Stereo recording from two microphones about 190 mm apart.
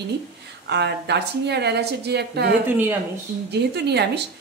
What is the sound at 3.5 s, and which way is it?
Speech, 60° right (ahead or behind).